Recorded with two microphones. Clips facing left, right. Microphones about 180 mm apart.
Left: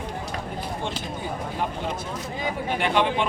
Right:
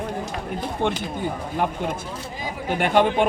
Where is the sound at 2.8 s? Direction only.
45° right (ahead or behind).